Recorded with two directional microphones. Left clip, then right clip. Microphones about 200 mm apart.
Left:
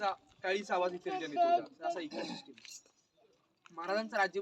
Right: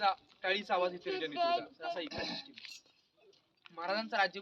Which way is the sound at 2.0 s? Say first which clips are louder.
Right 2 dB; 10° left (ahead or behind).